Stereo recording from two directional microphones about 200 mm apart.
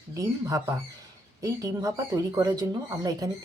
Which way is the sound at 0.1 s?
15° right (ahead or behind).